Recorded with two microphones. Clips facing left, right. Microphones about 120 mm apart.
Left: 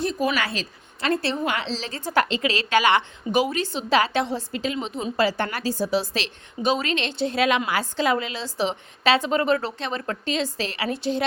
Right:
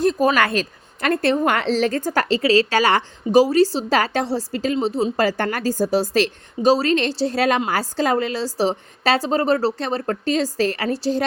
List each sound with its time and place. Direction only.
0.0 s speech: 45° right (ahead or behind)